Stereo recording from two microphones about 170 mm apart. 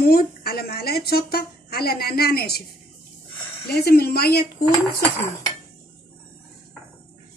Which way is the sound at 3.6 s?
65° left (ahead or behind).